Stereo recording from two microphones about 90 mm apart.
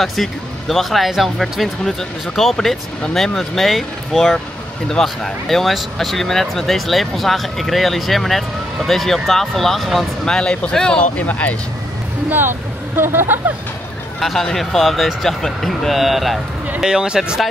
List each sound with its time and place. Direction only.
0.0 s speech: centre (ahead or behind); by 11.5 s 15° left (ahead or behind)
12.3 s speech: 25° right (ahead or behind)
14.2 s speech: 5° left (ahead or behind)